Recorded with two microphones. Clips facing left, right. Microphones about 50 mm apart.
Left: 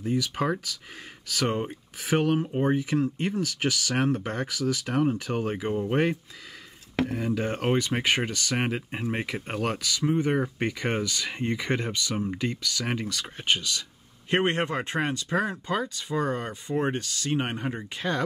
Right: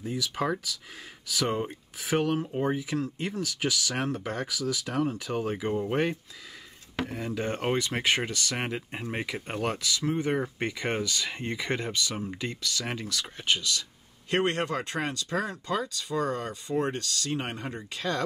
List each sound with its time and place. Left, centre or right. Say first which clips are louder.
0.0 s speech: left 3 dB; centre
7.0 s speech: left 5 dB; centre